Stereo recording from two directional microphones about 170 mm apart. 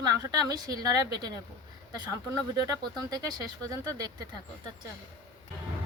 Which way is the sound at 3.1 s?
20° right (ahead or behind).